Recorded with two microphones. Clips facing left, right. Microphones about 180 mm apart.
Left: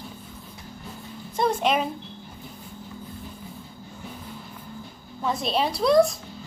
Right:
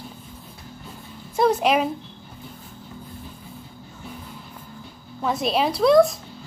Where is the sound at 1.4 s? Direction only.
5° right (ahead or behind).